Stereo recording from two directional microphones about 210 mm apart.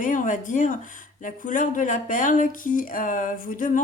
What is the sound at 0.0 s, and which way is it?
Speech, 40° left (ahead or behind).